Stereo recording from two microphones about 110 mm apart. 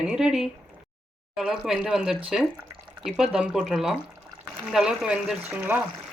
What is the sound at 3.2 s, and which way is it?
A woman's voice, 5° right (ahead or behind).